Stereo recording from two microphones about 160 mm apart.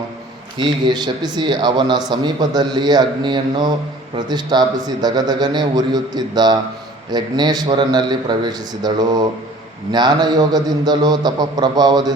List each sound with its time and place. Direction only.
0.6 s a man's voice: 30° right (ahead or behind)